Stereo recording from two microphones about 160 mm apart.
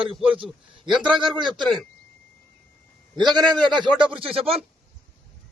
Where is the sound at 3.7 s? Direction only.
30° right (ahead or behind).